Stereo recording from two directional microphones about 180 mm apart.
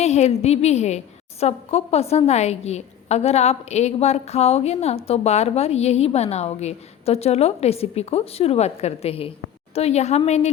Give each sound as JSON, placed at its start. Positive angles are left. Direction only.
{"t": 0.0, "sound": "a woman's voice", "side_deg": 40}